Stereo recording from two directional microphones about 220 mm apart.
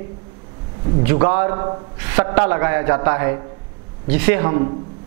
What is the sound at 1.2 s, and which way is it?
A man's voice, 15° right (ahead or behind).